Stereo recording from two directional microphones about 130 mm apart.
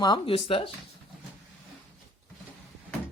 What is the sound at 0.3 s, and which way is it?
Speech, 45° left (ahead or behind).